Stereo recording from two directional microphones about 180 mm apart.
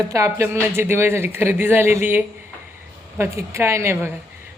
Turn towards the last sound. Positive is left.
turn(degrees=-15)  # may be behind; listen again after turning